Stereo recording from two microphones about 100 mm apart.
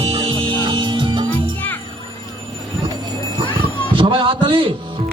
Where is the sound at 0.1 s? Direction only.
60° right (ahead or behind).